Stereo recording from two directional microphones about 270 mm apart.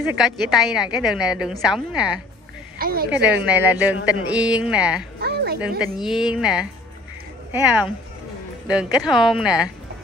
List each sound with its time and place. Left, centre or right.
0.2 s a woman's voice: centre
2.8 s a woman's voice: right
3.1 s a woman's voice: centre
5.2 s a sound: right
5.9 s a woman's voice: centre
9.0 s a woman's voice: centre